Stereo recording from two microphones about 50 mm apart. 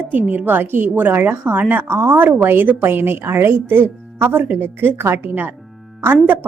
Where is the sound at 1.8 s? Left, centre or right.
Right.